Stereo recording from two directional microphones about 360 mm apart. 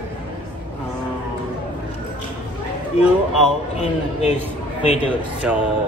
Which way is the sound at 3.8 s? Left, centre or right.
Centre.